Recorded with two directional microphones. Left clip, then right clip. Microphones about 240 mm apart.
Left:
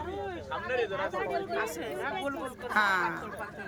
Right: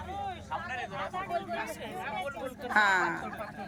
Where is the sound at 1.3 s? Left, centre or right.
Centre.